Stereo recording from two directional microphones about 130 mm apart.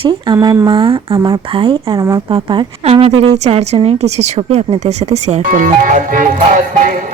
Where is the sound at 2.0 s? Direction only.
25° right (ahead or behind).